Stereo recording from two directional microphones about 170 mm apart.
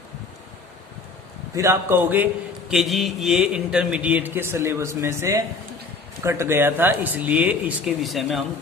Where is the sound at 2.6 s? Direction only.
Centre (ahead or behind).